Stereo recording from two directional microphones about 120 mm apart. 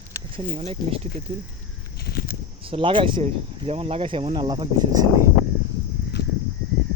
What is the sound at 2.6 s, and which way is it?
Speech, 50° right (ahead or behind).